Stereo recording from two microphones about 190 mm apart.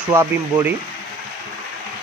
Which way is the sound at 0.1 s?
15° right (ahead or behind).